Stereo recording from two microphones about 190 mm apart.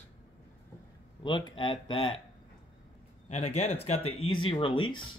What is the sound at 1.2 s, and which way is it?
Speech, 25° left (ahead or behind).